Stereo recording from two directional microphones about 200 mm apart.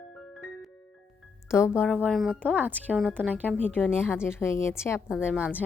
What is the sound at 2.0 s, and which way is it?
Speech, centre (ahead or behind).